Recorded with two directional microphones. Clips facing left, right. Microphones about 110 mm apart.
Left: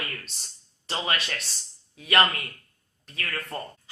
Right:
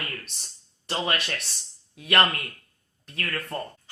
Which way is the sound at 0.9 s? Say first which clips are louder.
Right 2 dB; 50° right (ahead or behind).